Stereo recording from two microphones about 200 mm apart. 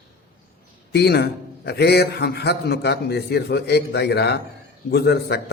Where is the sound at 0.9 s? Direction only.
55° left (ahead or behind).